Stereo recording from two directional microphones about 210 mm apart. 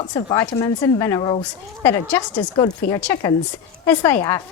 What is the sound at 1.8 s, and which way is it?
Speech, 10° left (ahead or behind).